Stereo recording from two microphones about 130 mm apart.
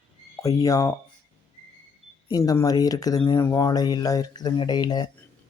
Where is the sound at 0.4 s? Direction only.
25° left (ahead or behind).